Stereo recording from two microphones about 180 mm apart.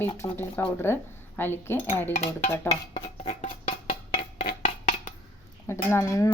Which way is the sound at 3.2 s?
45° left (ahead or behind).